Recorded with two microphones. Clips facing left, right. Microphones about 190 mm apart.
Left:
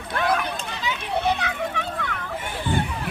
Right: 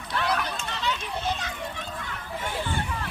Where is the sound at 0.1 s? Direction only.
50° left (ahead or behind).